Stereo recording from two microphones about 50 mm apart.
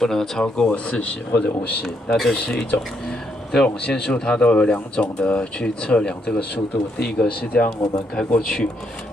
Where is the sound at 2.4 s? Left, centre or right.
Centre.